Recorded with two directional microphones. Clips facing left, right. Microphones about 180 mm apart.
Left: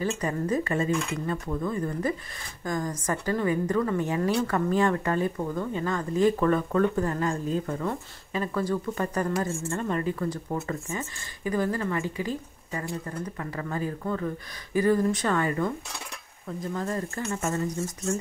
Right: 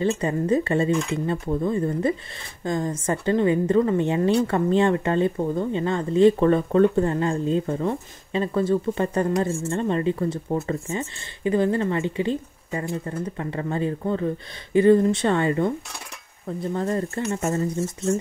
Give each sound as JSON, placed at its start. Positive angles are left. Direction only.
{"t": 0.0, "sound": "a woman's voice", "side_deg": -25}